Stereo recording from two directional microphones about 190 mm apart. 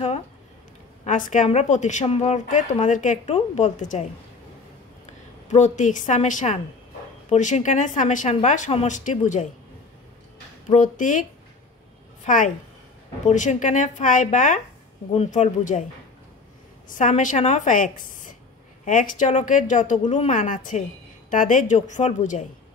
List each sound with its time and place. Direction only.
1.0 s a woman's voice: 45° left (ahead or behind)
5.5 s a woman's voice: 40° left (ahead or behind)
10.7 s a woman's voice: 40° left (ahead or behind)
12.3 s a woman's voice: 45° left (ahead or behind)
16.9 s a woman's voice: 40° left (ahead or behind)